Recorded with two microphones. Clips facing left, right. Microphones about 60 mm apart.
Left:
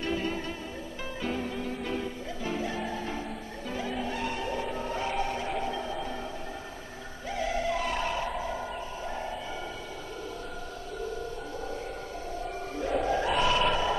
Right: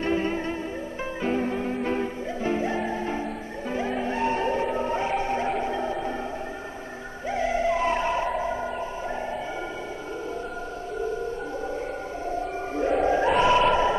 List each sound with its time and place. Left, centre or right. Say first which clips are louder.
0.0 s music: right 6 dB; right
7.2 s music: right 6 dB; right
12.3 s a sound: right 7 dB; right
13.0 s choir: right 6 dB; right